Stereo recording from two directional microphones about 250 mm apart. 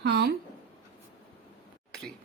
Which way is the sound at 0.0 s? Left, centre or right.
Right.